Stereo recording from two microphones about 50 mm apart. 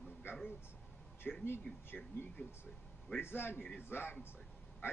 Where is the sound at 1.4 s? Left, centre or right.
Left.